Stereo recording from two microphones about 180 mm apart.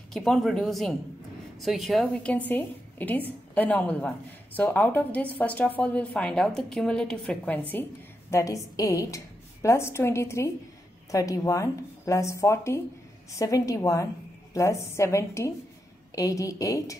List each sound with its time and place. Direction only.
0.1 s a woman's voice: centre (ahead or behind); by 16.9 s 20° left (ahead or behind)